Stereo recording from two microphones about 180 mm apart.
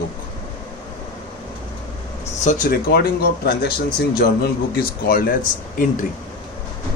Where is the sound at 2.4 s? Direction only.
55° left (ahead or behind).